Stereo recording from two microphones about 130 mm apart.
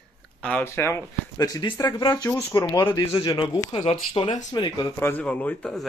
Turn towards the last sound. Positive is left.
turn(degrees=5)  # may be behind; listen again after turning